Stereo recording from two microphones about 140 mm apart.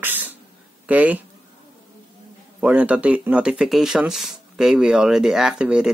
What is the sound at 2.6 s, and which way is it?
Speech, 10° right (ahead or behind).